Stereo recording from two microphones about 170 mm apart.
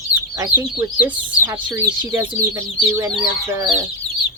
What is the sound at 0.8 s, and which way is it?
Speech, 15° right (ahead or behind).